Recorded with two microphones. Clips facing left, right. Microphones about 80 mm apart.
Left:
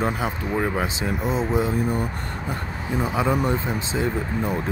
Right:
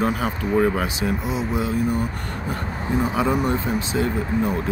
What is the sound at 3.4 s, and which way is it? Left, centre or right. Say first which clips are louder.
Speech: right 1 dB; left.